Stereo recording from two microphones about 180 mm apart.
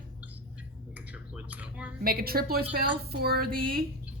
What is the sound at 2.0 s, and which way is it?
A woman's voice, 55° right (ahead or behind).